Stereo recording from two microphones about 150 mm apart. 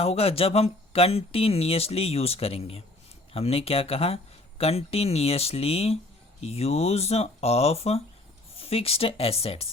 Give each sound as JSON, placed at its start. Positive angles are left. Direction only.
{"t": 0.0, "sound": "speech", "side_deg": 40}